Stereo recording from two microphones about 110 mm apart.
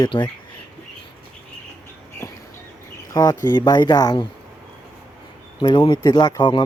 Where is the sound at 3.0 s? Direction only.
35° left (ahead or behind).